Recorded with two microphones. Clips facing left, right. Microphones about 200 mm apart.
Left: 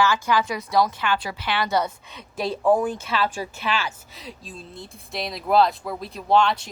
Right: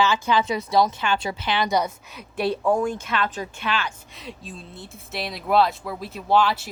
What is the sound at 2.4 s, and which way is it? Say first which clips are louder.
Speech: even; centre (ahead or behind).